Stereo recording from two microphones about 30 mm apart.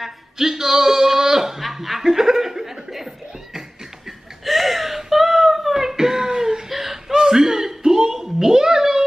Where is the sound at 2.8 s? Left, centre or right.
Centre.